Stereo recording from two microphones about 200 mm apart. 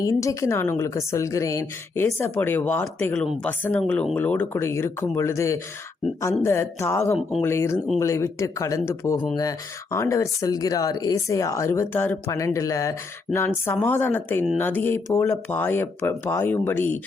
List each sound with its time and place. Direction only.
0.0 s a woman's voice: 15° left (ahead or behind)